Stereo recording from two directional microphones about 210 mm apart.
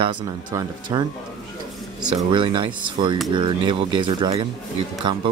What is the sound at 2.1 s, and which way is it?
Speech, 25° right (ahead or behind).